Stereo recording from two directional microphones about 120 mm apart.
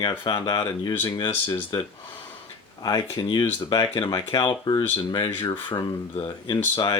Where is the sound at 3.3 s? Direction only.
35° left (ahead or behind).